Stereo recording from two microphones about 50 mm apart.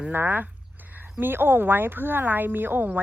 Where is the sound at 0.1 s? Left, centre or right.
Right.